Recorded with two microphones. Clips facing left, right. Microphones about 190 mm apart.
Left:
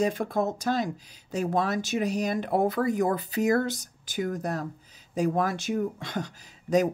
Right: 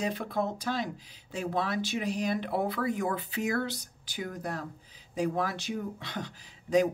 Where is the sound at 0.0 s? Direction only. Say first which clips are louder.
Left 5 dB; 45° left (ahead or behind).